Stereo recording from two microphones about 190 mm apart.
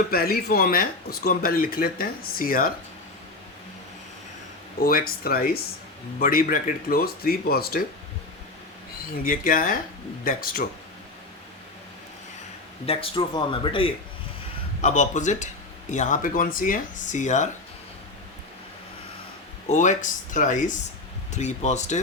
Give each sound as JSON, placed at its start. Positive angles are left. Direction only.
{"t": 0.1, "sound": "speech", "side_deg": 55}
{"t": 4.8, "sound": "speech", "side_deg": 50}
{"t": 9.2, "sound": "speech", "side_deg": 50}
{"t": 12.8, "sound": "speech", "side_deg": 30}
{"t": 14.8, "sound": "speech", "side_deg": 40}
{"t": 19.6, "sound": "speech", "side_deg": 40}